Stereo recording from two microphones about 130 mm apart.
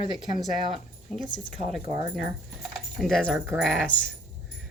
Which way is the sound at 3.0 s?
5° left (ahead or behind).